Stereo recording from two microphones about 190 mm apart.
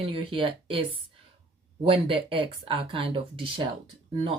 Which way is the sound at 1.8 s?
30° right (ahead or behind).